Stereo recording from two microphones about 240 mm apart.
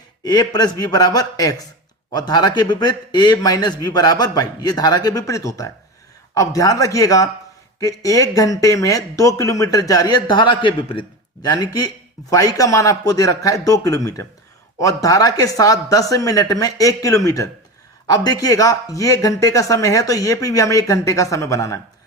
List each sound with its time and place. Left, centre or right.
0.3 s speech: centre